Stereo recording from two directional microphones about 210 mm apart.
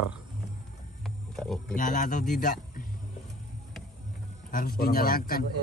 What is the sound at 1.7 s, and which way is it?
A man's voice, 40° left (ahead or behind).